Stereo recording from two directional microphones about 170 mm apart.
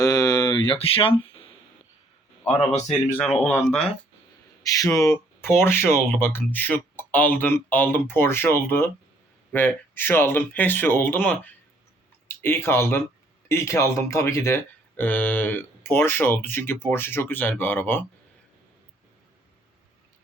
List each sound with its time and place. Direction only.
0.0 s a sound: 20° left (ahead or behind)
3.4 s speech: 5° left (ahead or behind)
4.6 s speech: 20° left (ahead or behind)
12.4 s speech: 15° left (ahead or behind)